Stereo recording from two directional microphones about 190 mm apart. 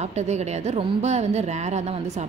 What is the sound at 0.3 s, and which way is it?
A woman's voice, 35° right (ahead or behind).